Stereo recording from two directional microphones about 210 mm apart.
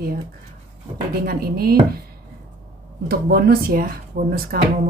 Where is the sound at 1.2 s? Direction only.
45° right (ahead or behind).